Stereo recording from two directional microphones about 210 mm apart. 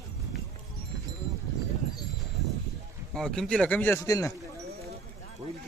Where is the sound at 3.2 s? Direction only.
Centre (ahead or behind).